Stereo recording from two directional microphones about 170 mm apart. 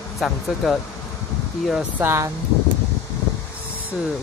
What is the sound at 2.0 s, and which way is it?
Speech, 15° right (ahead or behind).